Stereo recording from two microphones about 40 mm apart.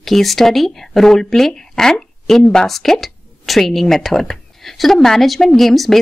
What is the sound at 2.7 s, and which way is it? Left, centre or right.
Speech, centre.